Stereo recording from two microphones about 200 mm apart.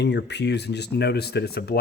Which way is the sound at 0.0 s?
60° left (ahead or behind).